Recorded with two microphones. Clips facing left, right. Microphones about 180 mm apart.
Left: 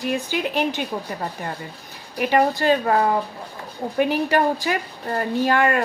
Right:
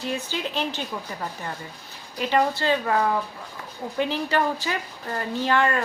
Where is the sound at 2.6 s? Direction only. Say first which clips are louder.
Left 4 dB; 45° left (ahead or behind).